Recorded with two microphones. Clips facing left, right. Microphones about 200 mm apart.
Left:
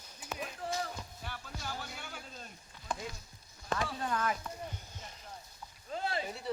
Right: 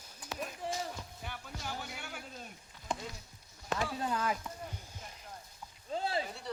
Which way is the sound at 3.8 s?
10° right (ahead or behind).